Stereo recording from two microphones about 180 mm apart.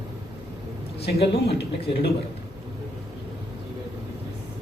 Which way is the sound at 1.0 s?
65° left (ahead or behind).